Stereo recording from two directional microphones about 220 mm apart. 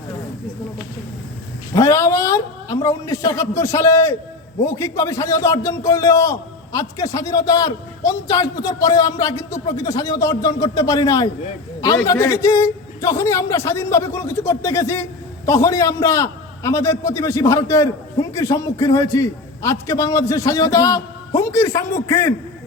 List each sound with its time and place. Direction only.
1.7 s a man's voice: 15° left (ahead or behind)